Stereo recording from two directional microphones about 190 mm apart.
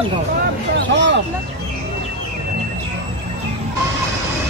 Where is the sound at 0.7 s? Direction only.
65° right (ahead or behind).